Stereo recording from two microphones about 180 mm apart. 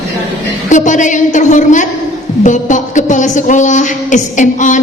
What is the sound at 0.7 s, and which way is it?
A woman's voice, 45° left (ahead or behind).